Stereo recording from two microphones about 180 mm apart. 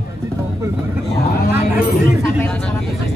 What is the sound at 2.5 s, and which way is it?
Vehicle, 5° left (ahead or behind).